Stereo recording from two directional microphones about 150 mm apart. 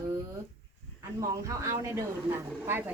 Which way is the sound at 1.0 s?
20° right (ahead or behind).